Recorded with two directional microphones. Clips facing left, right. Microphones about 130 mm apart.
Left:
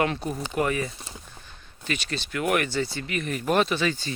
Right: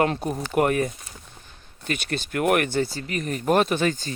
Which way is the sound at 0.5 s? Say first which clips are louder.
Right 5 dB; 55° right (ahead or behind).